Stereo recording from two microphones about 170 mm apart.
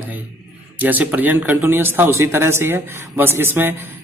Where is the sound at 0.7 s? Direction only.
10° right (ahead or behind).